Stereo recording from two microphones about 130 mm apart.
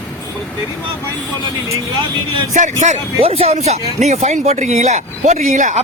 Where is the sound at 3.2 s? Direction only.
50° right (ahead or behind); by 5.8 s 75° right (ahead or behind).